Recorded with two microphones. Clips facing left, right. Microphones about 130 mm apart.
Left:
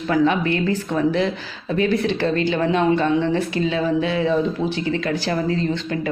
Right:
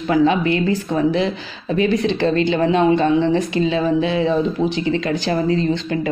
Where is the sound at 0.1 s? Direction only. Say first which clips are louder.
Right 3 dB; 20° right (ahead or behind).